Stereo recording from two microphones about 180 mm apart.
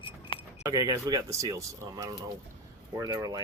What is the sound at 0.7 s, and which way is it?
Speech, 20° right (ahead or behind).